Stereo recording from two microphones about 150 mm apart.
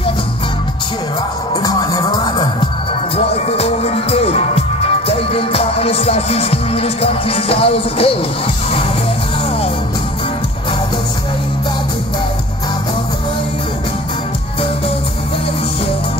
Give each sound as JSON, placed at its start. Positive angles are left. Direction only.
{"t": 1.5, "sound": "music", "side_deg": 25}
{"t": 3.4, "sound": "music", "side_deg": 45}